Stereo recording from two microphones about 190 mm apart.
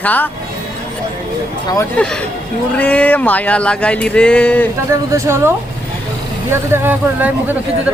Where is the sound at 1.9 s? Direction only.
5° left (ahead or behind).